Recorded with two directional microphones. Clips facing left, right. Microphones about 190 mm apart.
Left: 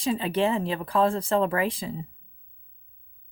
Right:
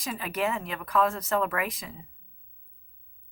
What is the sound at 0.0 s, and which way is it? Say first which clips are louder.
Speech: left 6 dB; 30° left (ahead or behind).